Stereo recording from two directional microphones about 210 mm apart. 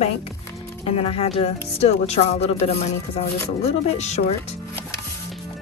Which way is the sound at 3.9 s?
30° left (ahead or behind).